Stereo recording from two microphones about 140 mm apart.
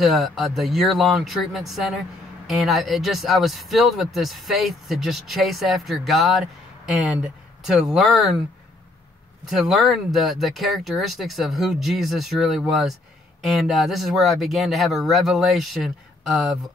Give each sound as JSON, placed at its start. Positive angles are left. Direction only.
{"t": 0.0, "sound": "speech", "side_deg": 0}
{"t": 9.5, "sound": "speech", "side_deg": 0}